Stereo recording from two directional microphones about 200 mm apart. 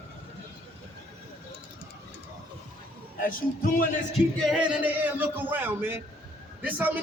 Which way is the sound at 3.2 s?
45° left (ahead or behind).